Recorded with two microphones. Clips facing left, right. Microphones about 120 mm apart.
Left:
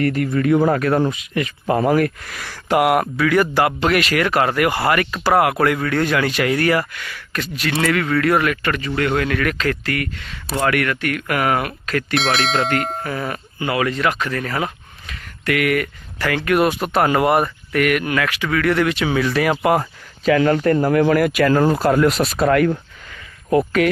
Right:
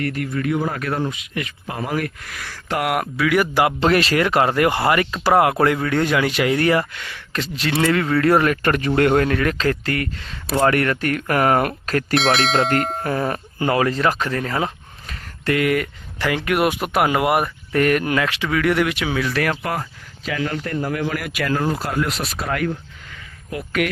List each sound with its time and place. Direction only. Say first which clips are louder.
0.0 s speech: left 5 dB; 40° left (ahead or behind)
1.1 s speech: left 5 dB; 40° left (ahead or behind)
2.6 s speech: left 6 dB; 5° left (ahead or behind); by 3.8 s 15° right (ahead or behind)
3.8 s speech: right 1 dB; 30° right (ahead or behind)
9.0 s speech: right 4 dB; 45° right (ahead or behind)
9.2 s speech: right 1 dB; 30° right (ahead or behind)
12.1 s speech: right 2 dB; centre (ahead or behind)
13.1 s speech: right 3 dB; 35° right (ahead or behind)
15.0 s a sound: even; 40° right (ahead or behind)
15.5 s speech: even; 20° right (ahead or behind)
17.7 s speech: right 3 dB; 30° right (ahead or behind); by 19.5 s 5° left (ahead or behind)
19.8 s speech: left 10 dB; 55° left (ahead or behind)
23.5 s speech: left 7 dB; 30° left (ahead or behind)